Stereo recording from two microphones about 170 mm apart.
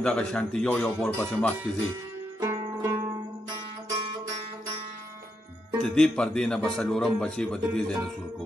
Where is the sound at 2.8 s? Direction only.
20° right (ahead or behind).